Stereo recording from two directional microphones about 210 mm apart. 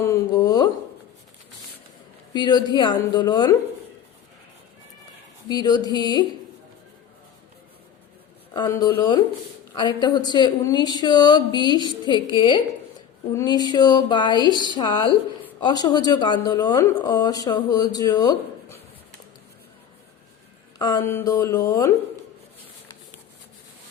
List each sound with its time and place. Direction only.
0.0 s a sound: 15° left (ahead or behind)
2.3 s speech: 20° left (ahead or behind)
5.5 s speech: 20° left (ahead or behind)
8.5 s speech: 15° left (ahead or behind)
20.7 s speech: 20° left (ahead or behind)